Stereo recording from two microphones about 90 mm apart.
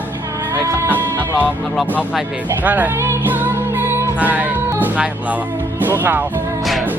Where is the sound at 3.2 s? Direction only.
20° right (ahead or behind).